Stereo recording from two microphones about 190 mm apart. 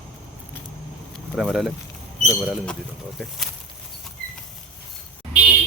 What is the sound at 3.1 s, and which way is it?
Speech, centre (ahead or behind).